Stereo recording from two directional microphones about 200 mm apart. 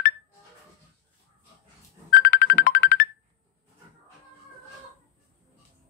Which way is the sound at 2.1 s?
50° left (ahead or behind).